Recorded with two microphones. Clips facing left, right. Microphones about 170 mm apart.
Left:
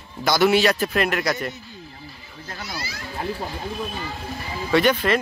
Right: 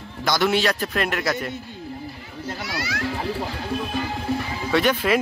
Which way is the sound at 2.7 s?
75° right (ahead or behind).